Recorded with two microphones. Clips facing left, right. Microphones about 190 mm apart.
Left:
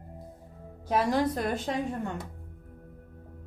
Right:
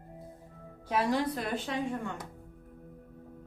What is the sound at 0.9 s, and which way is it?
Speech, 45° left (ahead or behind).